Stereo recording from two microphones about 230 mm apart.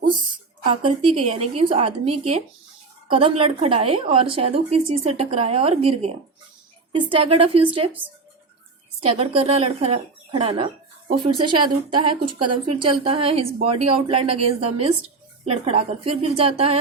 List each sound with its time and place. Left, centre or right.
0.6 s a woman's voice: right
3.1 s a woman's voice: right
9.0 s a woman's voice: right